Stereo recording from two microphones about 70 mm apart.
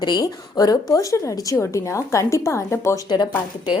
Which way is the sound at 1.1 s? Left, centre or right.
Left.